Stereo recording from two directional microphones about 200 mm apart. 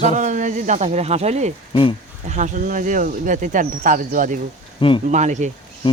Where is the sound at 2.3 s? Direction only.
40° right (ahead or behind).